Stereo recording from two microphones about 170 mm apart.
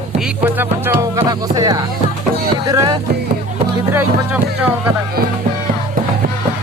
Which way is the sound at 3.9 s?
10° right (ahead or behind).